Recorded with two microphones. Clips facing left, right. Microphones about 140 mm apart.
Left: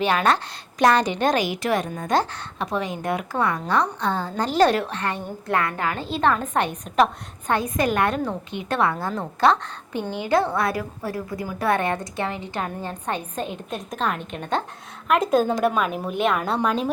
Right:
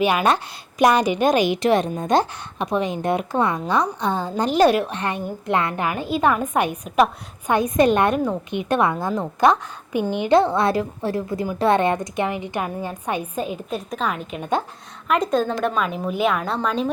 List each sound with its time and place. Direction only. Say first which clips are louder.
0.0 s a woman's voice: right 2 dB; 10° right (ahead or behind); by 16.9 s 5° left (ahead or behind)